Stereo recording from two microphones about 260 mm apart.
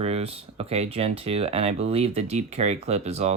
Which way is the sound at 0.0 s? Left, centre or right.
Right.